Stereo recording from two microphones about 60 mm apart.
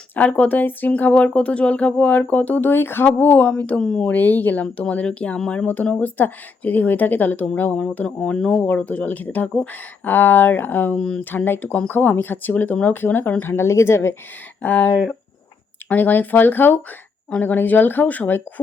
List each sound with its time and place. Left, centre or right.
0.2 s speech: left
3.8 s speech: centre
4.1 s speech: left; by 8.6 s centre
8.6 s speech: left
10.9 s speech: centre
11.2 s speech: left
13.7 s speech: left
14.6 s speech: left